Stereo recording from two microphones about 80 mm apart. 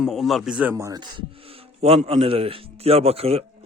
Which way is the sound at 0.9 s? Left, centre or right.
Right.